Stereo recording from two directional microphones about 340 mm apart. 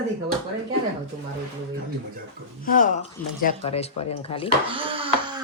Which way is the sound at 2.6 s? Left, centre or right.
Left.